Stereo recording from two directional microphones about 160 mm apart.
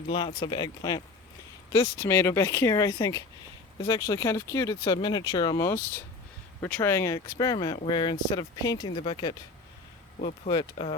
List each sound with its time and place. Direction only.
0.1 s speech: 30° left (ahead or behind)
10.2 s speech: 50° left (ahead or behind)
10.5 s speech: 35° left (ahead or behind)